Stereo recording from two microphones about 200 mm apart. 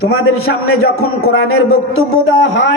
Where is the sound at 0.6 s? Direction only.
90° left.